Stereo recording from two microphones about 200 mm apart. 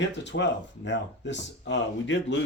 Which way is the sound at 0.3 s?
60° left (ahead or behind).